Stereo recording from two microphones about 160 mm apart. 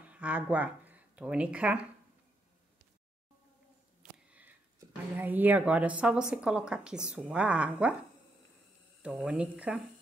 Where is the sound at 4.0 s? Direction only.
10° right (ahead or behind).